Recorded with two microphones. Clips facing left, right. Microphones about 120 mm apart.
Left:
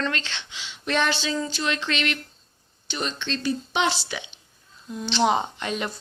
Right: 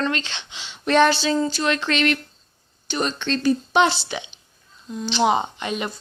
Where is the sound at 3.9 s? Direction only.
25° right (ahead or behind).